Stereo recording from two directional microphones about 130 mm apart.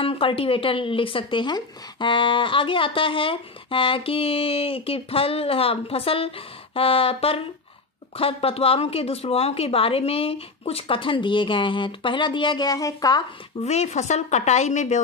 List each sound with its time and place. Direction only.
0.0 s speech: 45° left (ahead or behind); by 13.2 s 30° left (ahead or behind)
13.6 s a woman's voice: 60° left (ahead or behind)